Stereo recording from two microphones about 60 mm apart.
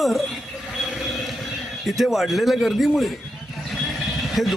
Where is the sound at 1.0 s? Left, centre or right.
Centre.